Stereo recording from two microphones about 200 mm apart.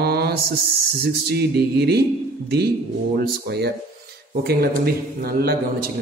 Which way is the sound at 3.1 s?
55° right (ahead or behind).